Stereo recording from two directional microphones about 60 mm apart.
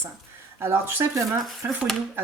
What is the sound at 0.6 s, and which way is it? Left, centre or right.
Speech, right.